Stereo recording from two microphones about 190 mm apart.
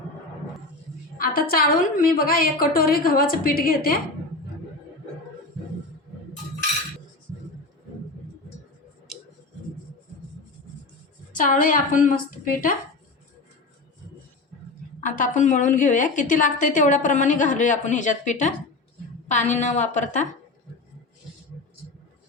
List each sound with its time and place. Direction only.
1.2 s a woman's voice: 50° left (ahead or behind)
11.3 s a woman's voice: 45° left (ahead or behind)
15.0 s a woman's voice: 40° left (ahead or behind)